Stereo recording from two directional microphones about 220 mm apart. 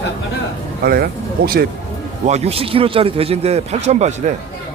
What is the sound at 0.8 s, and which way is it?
Speech, 45° right (ahead or behind).